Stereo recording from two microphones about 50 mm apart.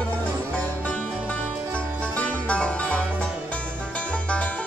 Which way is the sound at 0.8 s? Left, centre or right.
Left.